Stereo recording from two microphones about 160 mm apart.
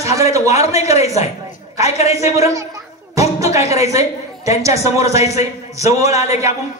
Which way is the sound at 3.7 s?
20° right (ahead or behind).